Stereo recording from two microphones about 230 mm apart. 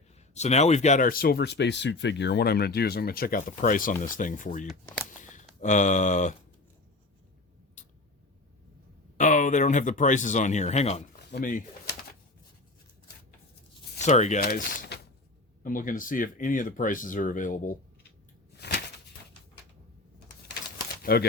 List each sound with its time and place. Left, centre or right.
0.3 s speech: left
9.1 s speech: left
11.3 s speech: left
14.0 s speech: left
18.5 s a sound: left
21.0 s speech: left